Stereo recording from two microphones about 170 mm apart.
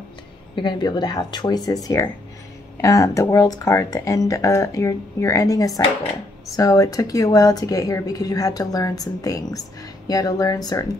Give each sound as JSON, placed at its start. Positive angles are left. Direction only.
{"t": 0.6, "sound": "a woman's voice", "side_deg": 25}